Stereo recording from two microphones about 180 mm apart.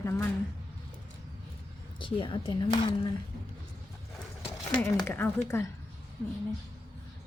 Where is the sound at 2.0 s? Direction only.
30° left (ahead or behind).